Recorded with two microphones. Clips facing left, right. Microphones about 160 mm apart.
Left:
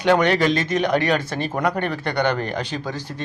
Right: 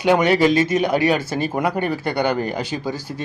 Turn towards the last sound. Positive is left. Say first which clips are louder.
# right 3 dB
turn(degrees=-10)  # may be behind; listen again after turning